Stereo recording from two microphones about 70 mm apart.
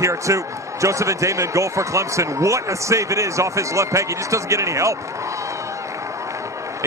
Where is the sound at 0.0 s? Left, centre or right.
Right.